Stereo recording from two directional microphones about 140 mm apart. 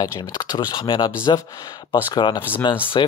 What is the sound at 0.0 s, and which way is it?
Speech, 30° left (ahead or behind).